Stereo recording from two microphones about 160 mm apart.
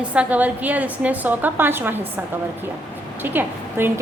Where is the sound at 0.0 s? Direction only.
10° right (ahead or behind).